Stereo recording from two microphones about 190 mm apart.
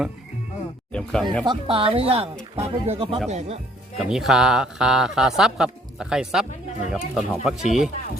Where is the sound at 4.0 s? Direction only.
Centre (ahead or behind).